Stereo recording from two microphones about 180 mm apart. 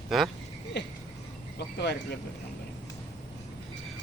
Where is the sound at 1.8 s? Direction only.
65° left (ahead or behind).